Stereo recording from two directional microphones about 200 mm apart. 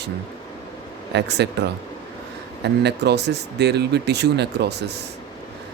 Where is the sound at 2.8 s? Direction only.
55° right (ahead or behind).